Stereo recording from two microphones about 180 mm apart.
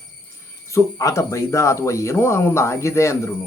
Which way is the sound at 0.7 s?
15° left (ahead or behind).